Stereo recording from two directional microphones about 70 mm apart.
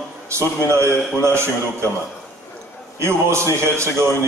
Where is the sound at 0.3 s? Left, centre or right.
Right.